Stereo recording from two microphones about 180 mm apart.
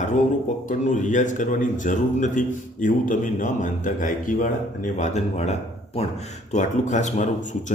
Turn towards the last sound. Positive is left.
turn(degrees=40)  # may be behind; listen again after turning